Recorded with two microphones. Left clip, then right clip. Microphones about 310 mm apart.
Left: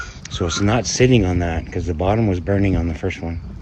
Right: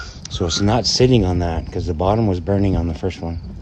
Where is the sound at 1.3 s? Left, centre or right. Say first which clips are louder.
Even; right.